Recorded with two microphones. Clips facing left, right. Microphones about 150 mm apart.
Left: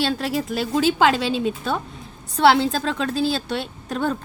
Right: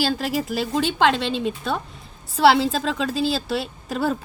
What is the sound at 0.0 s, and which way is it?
A woman's voice, centre (ahead or behind).